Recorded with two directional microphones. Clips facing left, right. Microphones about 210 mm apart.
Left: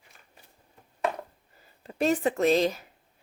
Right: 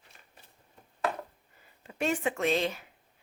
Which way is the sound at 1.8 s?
35° left (ahead or behind).